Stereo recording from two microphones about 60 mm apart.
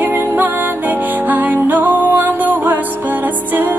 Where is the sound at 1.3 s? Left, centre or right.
Right.